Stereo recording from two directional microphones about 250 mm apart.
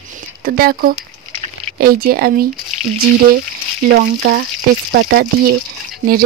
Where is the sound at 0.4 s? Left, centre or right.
Right.